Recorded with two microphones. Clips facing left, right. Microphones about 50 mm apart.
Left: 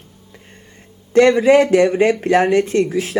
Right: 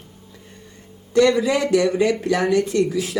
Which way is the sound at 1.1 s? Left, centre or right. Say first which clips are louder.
Left 6 dB; left.